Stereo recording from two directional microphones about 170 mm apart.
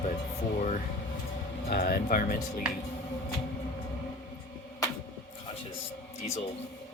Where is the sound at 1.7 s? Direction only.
60° left (ahead or behind).